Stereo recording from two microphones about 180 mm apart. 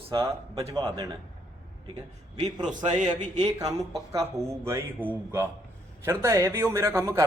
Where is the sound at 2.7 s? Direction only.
40° right (ahead or behind).